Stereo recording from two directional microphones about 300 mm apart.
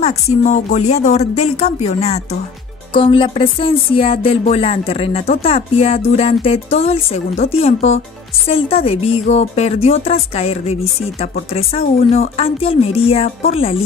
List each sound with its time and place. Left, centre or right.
0.0 s speech: left